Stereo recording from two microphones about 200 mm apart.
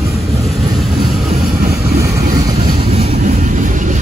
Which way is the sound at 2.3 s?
20° right (ahead or behind).